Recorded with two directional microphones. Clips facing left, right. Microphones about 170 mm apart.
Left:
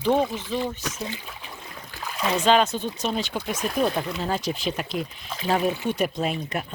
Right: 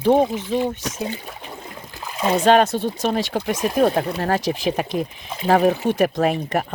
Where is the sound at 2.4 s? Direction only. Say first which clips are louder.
Right 4 dB; 55° right (ahead or behind).